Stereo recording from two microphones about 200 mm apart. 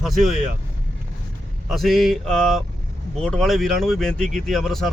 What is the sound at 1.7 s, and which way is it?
Speech, centre (ahead or behind).